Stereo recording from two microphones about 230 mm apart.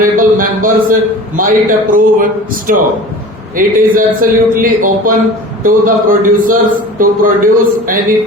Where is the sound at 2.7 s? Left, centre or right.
Right.